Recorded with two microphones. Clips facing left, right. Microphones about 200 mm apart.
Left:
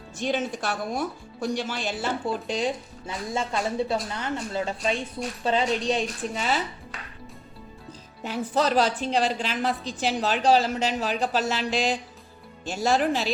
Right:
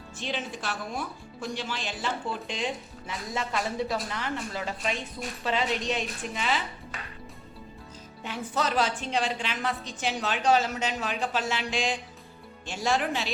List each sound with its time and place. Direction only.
0.3 s speech: 50° left (ahead or behind)
3.1 s a woman's voice: 30° left (ahead or behind)
8.2 s a woman's voice: 35° left (ahead or behind)